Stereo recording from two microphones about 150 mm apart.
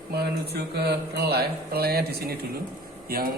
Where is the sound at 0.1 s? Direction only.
90° right.